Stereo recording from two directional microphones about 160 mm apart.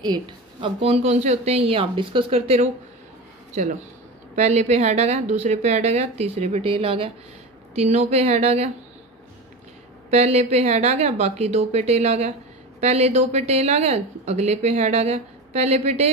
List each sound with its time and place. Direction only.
0.0 s speech: 30° right (ahead or behind)
4.4 s a woman's voice: 45° right (ahead or behind)
10.1 s a woman's voice: 40° right (ahead or behind)